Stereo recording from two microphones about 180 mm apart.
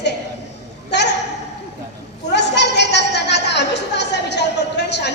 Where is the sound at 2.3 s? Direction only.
70° left (ahead or behind).